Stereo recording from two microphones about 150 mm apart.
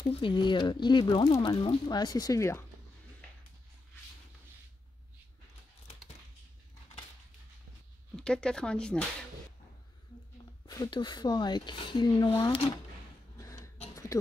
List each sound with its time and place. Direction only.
0.1 s speech: 30° left (ahead or behind)
8.2 s speech: 5° left (ahead or behind)
10.7 s speech: 30° left (ahead or behind)